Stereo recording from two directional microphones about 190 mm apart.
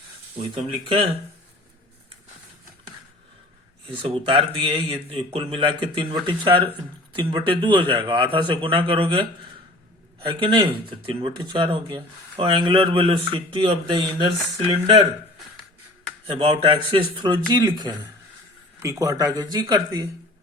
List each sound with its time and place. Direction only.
0.5 s speech: 30° right (ahead or behind)
3.8 s speech: 30° right (ahead or behind)
10.2 s speech: 25° right (ahead or behind)
16.2 s speech: 30° right (ahead or behind)